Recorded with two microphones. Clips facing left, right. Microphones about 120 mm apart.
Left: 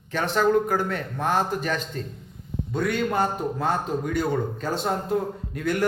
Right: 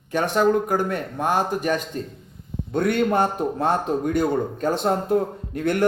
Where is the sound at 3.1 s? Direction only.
25° right (ahead or behind).